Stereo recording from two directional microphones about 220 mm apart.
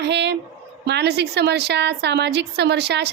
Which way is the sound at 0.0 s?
50° right (ahead or behind).